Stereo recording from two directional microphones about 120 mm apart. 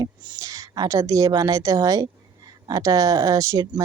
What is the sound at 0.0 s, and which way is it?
A woman's voice, 30° right (ahead or behind).